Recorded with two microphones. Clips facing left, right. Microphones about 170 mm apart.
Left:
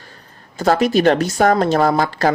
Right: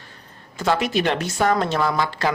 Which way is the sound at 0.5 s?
40° left (ahead or behind).